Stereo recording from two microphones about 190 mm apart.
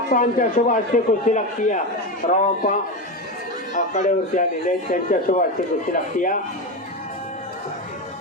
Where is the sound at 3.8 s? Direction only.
40° left (ahead or behind).